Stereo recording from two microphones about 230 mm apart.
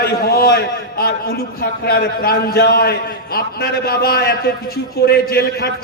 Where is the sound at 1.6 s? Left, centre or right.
Left.